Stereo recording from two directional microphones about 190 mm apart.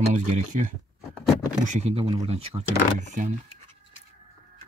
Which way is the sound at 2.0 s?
25° right (ahead or behind).